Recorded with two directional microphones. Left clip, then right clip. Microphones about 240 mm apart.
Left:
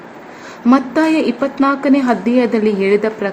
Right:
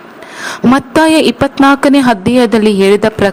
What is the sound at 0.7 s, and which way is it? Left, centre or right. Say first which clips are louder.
A woman's voice: right 5 dB; right.